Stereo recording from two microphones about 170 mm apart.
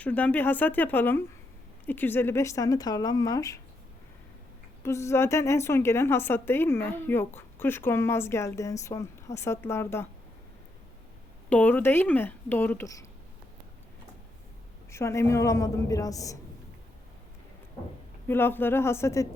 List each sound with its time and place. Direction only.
0.0 s a woman's voice: 10° left (ahead or behind)
4.8 s a woman's voice: 15° left (ahead or behind)
11.4 s a woman's voice: 10° left (ahead or behind)
14.8 s speech: 15° left (ahead or behind)
18.3 s a woman's voice: 15° left (ahead or behind)